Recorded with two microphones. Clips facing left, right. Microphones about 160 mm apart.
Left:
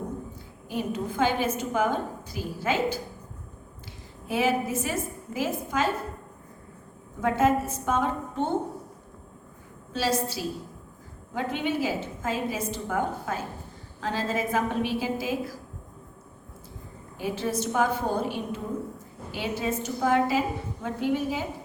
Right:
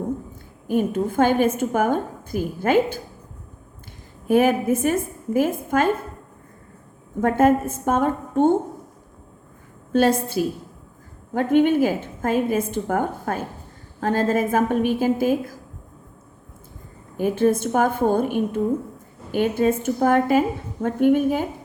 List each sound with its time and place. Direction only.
0.7 s a woman's voice: 50° right (ahead or behind)
4.3 s a woman's voice: 50° right (ahead or behind)
7.2 s a woman's voice: 50° right (ahead or behind)
9.9 s a woman's voice: 55° right (ahead or behind)
17.2 s a woman's voice: 50° right (ahead or behind)